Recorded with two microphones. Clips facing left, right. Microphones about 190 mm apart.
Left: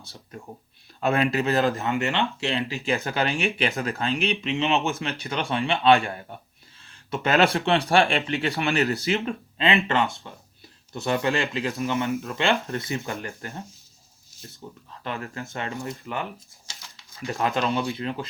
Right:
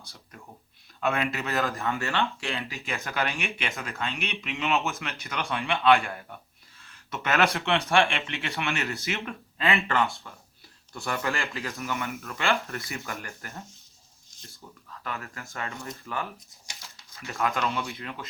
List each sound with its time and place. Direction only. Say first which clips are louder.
0.1 s speech: left 11 dB; 30° left (ahead or behind)
1.9 s speech: left 3 dB; 20° left (ahead or behind)
17.2 s speech: left 3 dB; 30° left (ahead or behind)